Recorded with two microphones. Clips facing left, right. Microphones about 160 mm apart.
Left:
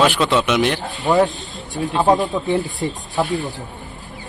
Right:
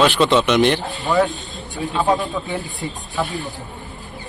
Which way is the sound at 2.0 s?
20° left (ahead or behind).